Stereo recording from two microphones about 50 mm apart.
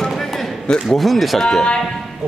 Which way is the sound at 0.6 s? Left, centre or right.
Centre.